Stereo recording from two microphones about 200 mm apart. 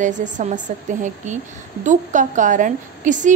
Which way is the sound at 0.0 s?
40° right (ahead or behind).